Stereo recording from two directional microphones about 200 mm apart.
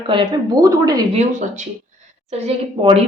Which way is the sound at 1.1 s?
35° right (ahead or behind).